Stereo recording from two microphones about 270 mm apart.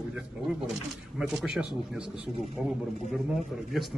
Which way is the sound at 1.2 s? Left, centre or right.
Centre.